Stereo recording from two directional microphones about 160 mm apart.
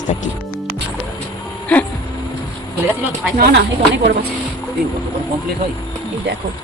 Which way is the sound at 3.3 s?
70° right (ahead or behind).